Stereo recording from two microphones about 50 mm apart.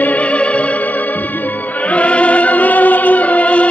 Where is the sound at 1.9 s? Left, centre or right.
Left.